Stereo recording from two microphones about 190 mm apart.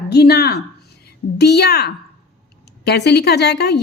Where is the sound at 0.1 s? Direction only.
60° left (ahead or behind).